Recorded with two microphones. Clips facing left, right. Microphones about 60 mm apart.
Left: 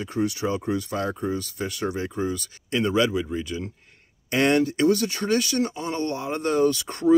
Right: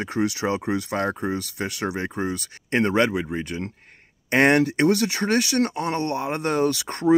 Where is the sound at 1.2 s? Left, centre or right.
Right.